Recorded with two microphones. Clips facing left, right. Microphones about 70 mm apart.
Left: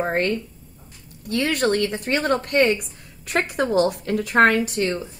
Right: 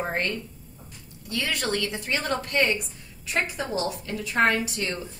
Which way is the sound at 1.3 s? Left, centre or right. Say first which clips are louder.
Left 7 dB; left.